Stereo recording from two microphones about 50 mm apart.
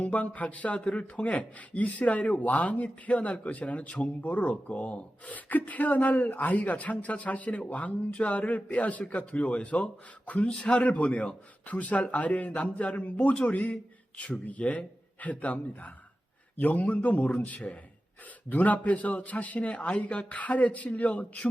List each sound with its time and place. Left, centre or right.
0.0 s speech: left